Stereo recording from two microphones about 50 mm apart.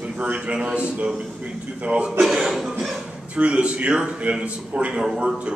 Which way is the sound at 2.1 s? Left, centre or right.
Centre.